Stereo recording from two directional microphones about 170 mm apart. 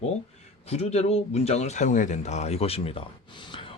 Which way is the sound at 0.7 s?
40° left (ahead or behind).